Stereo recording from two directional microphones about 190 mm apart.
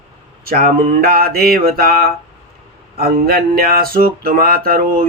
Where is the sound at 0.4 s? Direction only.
45° right (ahead or behind).